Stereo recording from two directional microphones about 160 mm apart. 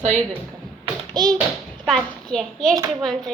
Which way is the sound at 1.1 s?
25° right (ahead or behind).